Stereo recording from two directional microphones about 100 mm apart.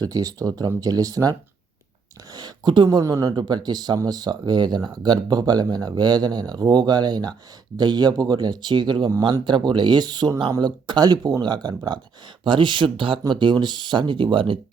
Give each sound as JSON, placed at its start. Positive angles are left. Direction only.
{"t": 0.0, "sound": "speech", "side_deg": -40}
{"t": 2.3, "sound": "speech", "side_deg": -50}
{"t": 3.0, "sound": "speech", "side_deg": -30}
{"t": 3.3, "sound": "speech", "side_deg": -45}